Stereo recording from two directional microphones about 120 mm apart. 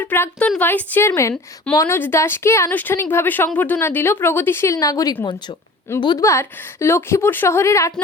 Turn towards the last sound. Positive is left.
turn(degrees=25)  # may be behind; listen again after turning